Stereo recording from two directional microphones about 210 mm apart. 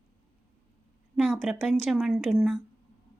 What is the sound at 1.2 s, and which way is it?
A woman's voice, 5° right (ahead or behind).